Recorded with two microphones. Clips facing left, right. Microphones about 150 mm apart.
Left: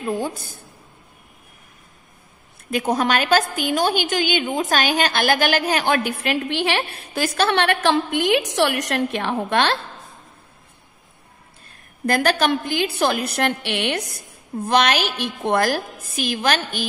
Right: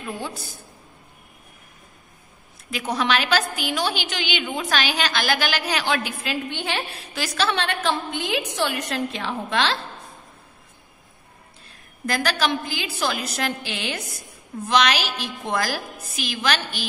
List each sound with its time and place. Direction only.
0.0 s a woman's voice: 45° left (ahead or behind)
2.7 s a woman's voice: 50° left (ahead or behind)
12.1 s a woman's voice: 55° left (ahead or behind)
14.6 s a woman's voice: 50° left (ahead or behind)